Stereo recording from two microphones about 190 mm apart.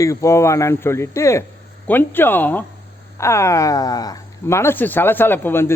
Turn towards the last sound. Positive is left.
turn(degrees=10)  # may be behind; listen again after turning